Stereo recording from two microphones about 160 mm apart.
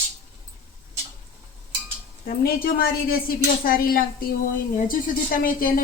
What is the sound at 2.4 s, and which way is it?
Speech, 65° left (ahead or behind).